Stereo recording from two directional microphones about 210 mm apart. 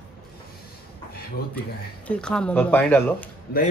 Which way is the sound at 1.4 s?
50° left (ahead or behind).